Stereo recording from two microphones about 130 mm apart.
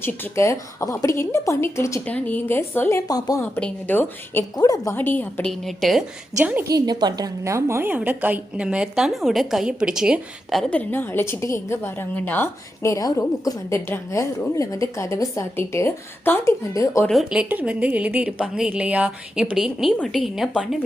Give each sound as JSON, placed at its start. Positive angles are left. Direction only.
{"t": 0.0, "sound": "a woman's voice", "side_deg": 20}
{"t": 3.1, "sound": "a woman's voice", "side_deg": 30}
{"t": 3.4, "sound": "a woman's voice", "side_deg": 10}
{"t": 4.5, "sound": "a woman's voice", "side_deg": 30}
{"t": 4.9, "sound": "a woman's voice", "side_deg": 15}
{"t": 5.5, "sound": "a woman's voice", "side_deg": 0}
{"t": 6.4, "sound": "a woman's voice", "side_deg": -15}
{"t": 6.7, "sound": "a woman's voice", "side_deg": -30}
{"t": 10.8, "sound": "a woman's voice", "side_deg": 15}
{"t": 17.1, "sound": "a woman's voice", "side_deg": -5}